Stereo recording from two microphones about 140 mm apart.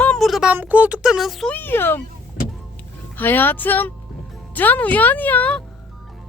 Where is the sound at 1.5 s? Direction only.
15° left (ahead or behind).